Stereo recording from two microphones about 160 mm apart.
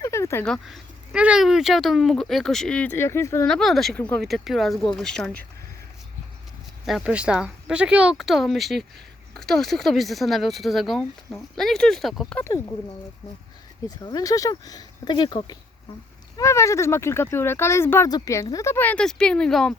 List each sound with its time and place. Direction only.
0.0 s a sound: 15° left (ahead or behind)
0.4 s speech: centre (ahead or behind)
3.4 s speech: 5° left (ahead or behind)
6.8 s speech: 5° right (ahead or behind)
12.5 s speech: 15° left (ahead or behind)
14.0 s speech: 25° left (ahead or behind); by 19.7 s 5° left (ahead or behind)